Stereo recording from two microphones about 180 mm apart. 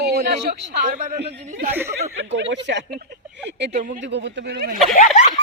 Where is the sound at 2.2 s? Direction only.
80° right.